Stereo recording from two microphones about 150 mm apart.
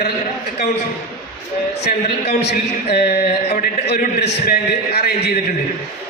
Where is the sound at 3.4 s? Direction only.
65° left (ahead or behind); by 5.1 s 90° left.